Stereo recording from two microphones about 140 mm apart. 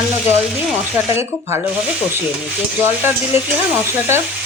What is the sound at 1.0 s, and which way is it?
Speech, 15° right (ahead or behind).